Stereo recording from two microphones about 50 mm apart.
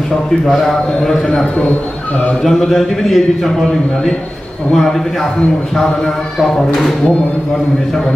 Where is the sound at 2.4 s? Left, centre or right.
Centre.